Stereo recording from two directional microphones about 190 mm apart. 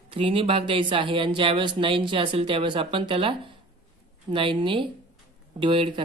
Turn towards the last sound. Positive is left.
turn(degrees=-25)  # may be behind; listen again after turning